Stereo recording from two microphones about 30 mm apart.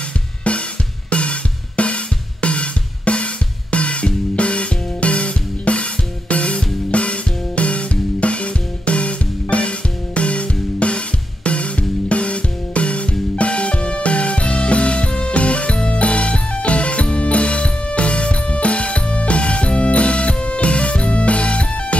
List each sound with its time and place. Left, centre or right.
0.4 s drum kit: left
3.7 s music: left